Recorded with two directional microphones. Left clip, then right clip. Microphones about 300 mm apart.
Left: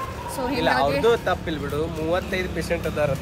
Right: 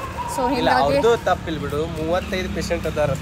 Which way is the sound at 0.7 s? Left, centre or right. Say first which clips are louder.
Right 2 dB; centre.